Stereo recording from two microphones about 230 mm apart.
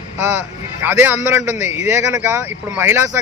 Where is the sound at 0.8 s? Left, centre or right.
Centre.